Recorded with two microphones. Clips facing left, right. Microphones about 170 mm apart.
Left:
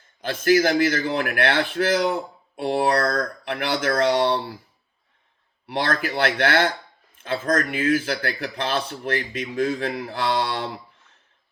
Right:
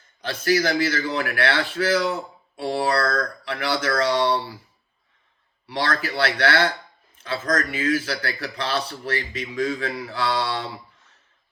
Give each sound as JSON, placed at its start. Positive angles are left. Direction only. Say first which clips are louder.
{"t": 0.2, "sound": "a man's voice", "louder": "left 3 dB", "side_deg": 50}
{"t": 5.6, "sound": "a man's voice", "louder": "left 1 dB", "side_deg": 50}